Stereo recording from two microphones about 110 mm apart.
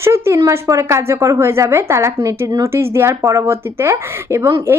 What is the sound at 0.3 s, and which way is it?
A woman's voice, 30° right (ahead or behind).